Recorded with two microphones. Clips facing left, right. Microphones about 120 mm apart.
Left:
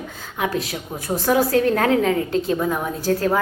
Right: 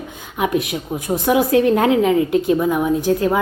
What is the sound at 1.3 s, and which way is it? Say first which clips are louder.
A woman's voice: right 3 dB; 20° right (ahead or behind).